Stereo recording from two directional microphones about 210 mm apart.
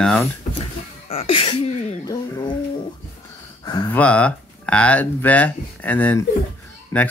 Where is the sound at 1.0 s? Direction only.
25° left (ahead or behind).